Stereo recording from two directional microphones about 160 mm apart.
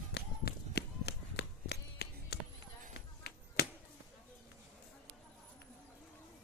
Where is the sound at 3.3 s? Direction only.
85° left.